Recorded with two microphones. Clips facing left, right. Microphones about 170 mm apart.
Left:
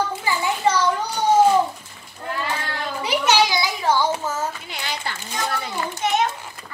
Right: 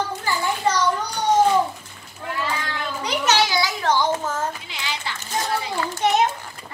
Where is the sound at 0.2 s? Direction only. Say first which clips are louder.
Even; 10° left (ahead or behind).